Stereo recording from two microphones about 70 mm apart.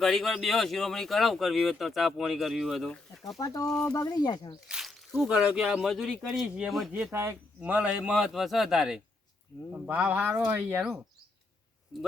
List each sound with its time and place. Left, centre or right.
0.0 s speech: centre
3.4 s speech: left
4.7 s a sound: centre
5.3 s speech: centre
7.1 s speech: right
7.6 s speech: centre
8.1 s speech: centre
9.7 s speech: right